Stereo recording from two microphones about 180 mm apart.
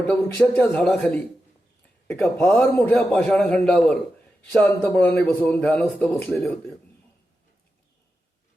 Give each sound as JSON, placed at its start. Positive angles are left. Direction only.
{"t": 0.1, "sound": "a man's voice", "side_deg": 10}